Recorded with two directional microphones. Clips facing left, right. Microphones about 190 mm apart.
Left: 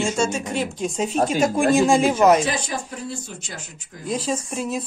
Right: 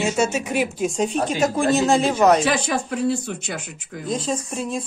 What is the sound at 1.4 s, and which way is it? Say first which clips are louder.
Speech: left 1 dB; 15° left (ahead or behind).